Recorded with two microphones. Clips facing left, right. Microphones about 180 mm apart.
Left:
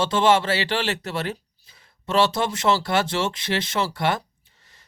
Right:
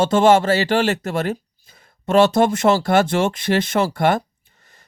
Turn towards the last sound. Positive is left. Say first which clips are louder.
# right 4 dB
turn(degrees=-50)  # may be behind; listen again after turning